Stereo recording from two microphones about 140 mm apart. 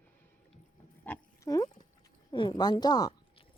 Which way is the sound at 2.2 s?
35° left (ahead or behind).